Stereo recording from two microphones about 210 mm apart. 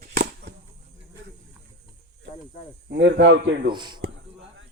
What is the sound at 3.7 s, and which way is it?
Speech, 20° right (ahead or behind).